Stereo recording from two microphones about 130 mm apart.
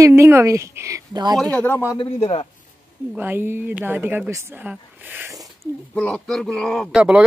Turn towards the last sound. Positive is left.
turn(degrees=5)  # may be behind; listen again after turning